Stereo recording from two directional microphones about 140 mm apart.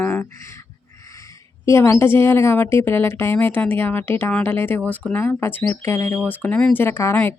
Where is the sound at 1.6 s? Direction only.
20° left (ahead or behind).